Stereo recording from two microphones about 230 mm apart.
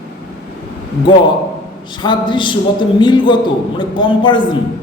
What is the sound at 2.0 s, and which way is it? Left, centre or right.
A man's voice, centre.